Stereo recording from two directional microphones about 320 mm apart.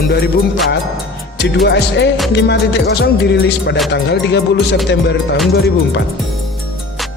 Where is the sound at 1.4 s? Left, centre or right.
Left.